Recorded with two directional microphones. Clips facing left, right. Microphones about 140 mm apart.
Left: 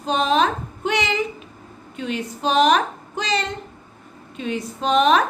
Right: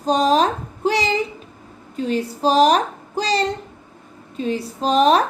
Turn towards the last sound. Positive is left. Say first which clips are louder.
# right 2 dB
turn(degrees=-35)  # may be behind; listen again after turning